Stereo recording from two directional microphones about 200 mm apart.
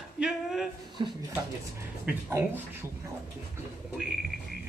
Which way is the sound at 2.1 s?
5° right (ahead or behind).